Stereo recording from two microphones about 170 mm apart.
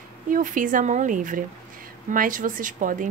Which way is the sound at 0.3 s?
50° right (ahead or behind).